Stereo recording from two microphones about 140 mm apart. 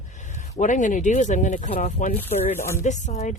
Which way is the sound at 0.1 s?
60° left (ahead or behind).